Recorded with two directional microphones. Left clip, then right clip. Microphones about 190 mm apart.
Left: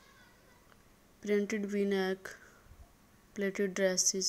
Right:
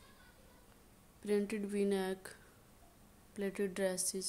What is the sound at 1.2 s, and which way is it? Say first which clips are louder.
Speech: left 4 dB; 10° left (ahead or behind).